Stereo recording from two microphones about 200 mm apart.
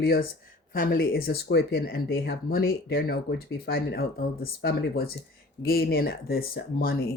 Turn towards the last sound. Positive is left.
turn(degrees=50)  # may be behind; listen again after turning